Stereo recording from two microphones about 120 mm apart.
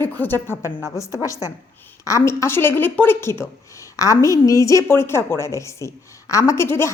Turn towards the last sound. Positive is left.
turn(degrees=20)  # may be behind; listen again after turning